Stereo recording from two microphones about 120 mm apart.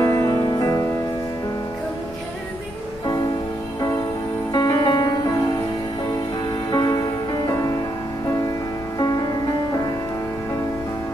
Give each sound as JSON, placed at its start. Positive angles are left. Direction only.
{"t": 0.0, "sound": "music", "side_deg": 25}
{"t": 4.5, "sound": "music", "side_deg": 35}
{"t": 6.7, "sound": "music", "side_deg": 35}
{"t": 8.9, "sound": "music", "side_deg": 35}